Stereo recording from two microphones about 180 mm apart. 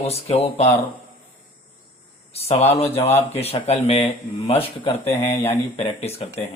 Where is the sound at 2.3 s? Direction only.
35° left (ahead or behind).